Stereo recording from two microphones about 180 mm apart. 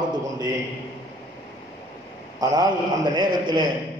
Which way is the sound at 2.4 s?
20° right (ahead or behind).